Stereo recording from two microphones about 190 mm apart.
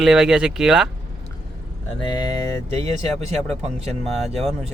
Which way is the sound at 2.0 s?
20° left (ahead or behind).